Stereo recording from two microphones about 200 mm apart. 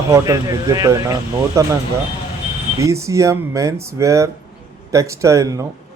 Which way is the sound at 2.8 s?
15° right (ahead or behind).